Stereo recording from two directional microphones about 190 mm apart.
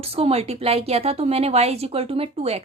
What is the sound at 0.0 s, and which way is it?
A woman's voice, 30° right (ahead or behind).